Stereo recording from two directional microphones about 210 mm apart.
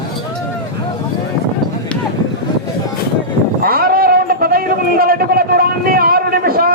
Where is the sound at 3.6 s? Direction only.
45° right (ahead or behind).